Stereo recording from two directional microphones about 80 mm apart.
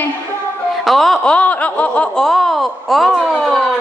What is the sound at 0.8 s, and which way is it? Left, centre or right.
Speech, centre.